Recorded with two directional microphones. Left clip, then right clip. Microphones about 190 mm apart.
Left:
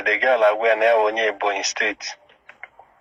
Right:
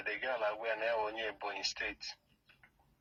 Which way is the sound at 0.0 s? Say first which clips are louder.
Left 19 dB; 45° left (ahead or behind).